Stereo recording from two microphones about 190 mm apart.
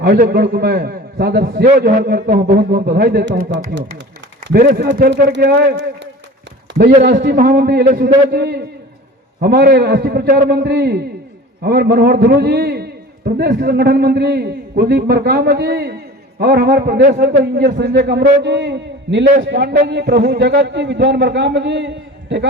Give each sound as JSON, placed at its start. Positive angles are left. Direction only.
{"t": 0.0, "sound": "a man's voice", "side_deg": -55}
{"t": 4.4, "sound": "a man's voice", "side_deg": -50}